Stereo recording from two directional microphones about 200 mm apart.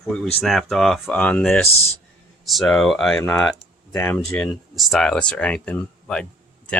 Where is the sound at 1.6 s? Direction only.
30° left (ahead or behind).